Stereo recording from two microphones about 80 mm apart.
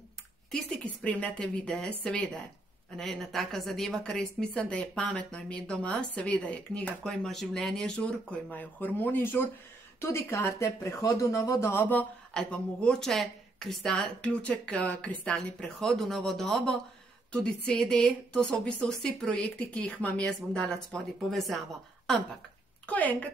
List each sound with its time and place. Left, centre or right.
0.8 s speech: centre; by 11.8 s left
11.8 s speech: centre
22.8 s a woman's voice: centre